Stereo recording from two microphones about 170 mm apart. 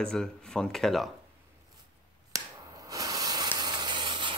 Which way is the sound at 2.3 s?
20° right (ahead or behind).